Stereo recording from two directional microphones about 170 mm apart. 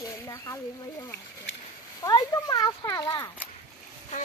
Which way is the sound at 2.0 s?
20° left (ahead or behind).